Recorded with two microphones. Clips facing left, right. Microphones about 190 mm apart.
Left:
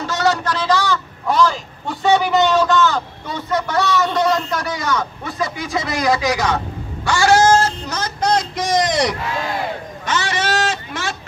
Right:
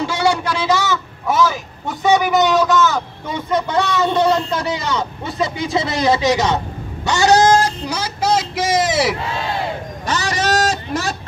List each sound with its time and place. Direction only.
0.0 s a sound: 10° right (ahead or behind)
2.2 s a man's voice: 5° right (ahead or behind)
10.0 s guitar: 40° right (ahead or behind)